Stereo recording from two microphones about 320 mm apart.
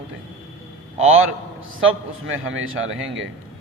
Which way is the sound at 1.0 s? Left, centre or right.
Right.